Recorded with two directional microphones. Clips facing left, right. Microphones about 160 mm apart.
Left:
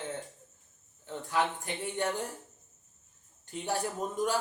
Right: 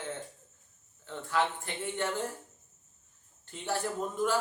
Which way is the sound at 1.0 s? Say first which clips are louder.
Even; 15° left (ahead or behind).